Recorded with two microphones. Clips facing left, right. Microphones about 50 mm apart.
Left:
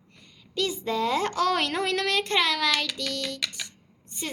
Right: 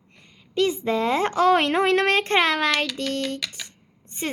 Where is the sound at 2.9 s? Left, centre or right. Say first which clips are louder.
Right 5 dB; right.